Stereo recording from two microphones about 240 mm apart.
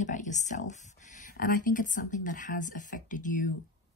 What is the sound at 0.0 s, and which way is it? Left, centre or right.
Speech, left.